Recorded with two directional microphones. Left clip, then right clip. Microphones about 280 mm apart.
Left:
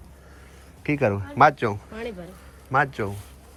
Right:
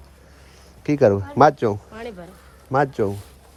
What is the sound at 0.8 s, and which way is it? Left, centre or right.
Speech, centre.